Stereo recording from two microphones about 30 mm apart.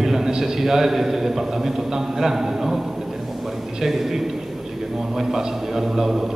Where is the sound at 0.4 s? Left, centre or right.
Centre.